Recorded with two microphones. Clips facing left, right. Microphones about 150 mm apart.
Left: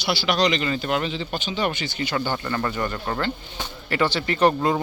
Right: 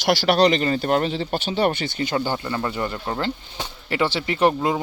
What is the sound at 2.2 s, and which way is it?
Speech, 15° right (ahead or behind).